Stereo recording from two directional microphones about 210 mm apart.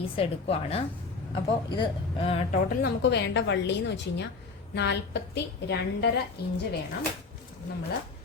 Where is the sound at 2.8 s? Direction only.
55° left (ahead or behind).